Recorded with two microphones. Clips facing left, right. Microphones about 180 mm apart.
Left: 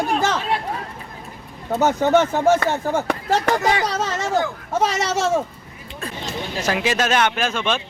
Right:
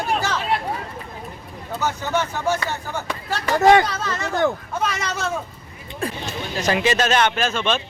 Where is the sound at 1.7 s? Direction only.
50° left (ahead or behind); by 5.4 s 90° left.